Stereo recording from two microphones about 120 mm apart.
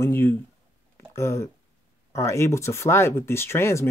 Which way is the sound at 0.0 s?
20° left (ahead or behind).